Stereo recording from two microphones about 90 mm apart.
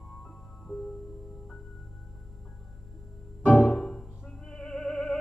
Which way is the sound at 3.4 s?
20° left (ahead or behind).